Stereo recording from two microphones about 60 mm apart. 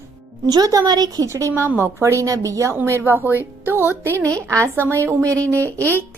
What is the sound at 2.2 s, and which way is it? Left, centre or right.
Speech, right.